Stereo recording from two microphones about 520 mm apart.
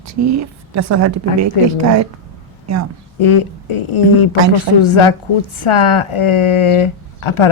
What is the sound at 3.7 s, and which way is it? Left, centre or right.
Speech, left.